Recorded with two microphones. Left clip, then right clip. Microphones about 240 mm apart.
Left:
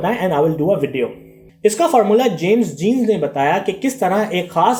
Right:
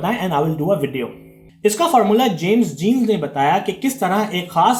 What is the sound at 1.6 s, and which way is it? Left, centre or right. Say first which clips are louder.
Speech: left 1 dB; right.